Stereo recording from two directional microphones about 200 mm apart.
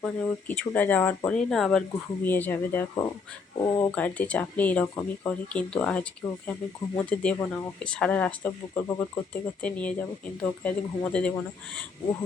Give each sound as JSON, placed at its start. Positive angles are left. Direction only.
{"t": 0.0, "sound": "speech", "side_deg": 10}